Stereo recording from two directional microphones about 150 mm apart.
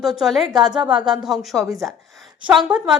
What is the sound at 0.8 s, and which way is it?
Speech, 30° right (ahead or behind).